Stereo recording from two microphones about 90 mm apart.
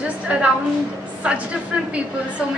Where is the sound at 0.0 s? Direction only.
15° right (ahead or behind).